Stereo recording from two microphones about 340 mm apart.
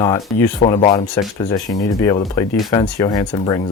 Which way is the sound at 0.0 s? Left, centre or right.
Centre.